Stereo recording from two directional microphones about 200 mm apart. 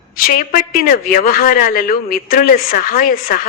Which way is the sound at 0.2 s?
45° left (ahead or behind).